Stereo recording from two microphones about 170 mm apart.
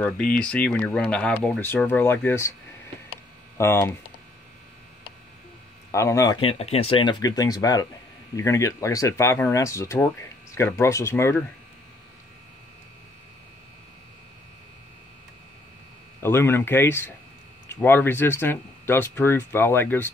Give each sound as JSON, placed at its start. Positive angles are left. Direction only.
{"t": 0.4, "sound": "speech", "side_deg": 5}
{"t": 3.5, "sound": "speech", "side_deg": 15}
{"t": 5.9, "sound": "speech", "side_deg": 15}
{"t": 6.4, "sound": "speech", "side_deg": 35}
{"t": 16.2, "sound": "speech", "side_deg": 15}